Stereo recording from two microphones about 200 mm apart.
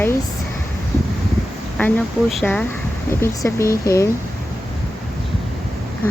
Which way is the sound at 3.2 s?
15° left (ahead or behind).